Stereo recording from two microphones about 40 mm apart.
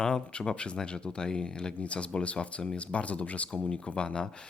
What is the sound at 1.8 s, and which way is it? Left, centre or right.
Speech, left.